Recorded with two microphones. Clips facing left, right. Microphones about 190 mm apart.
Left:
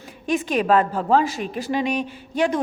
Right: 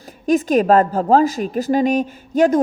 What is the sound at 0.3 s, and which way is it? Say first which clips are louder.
A woman's voice: right 6 dB; 40° right (ahead or behind).